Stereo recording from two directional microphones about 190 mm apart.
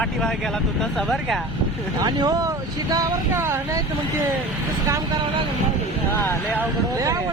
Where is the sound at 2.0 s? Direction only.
20° right (ahead or behind).